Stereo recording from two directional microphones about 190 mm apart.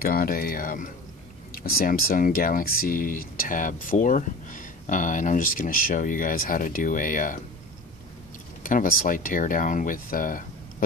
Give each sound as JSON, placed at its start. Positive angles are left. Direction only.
{"t": 0.0, "sound": "speech", "side_deg": 50}
{"t": 8.6, "sound": "speech", "side_deg": 45}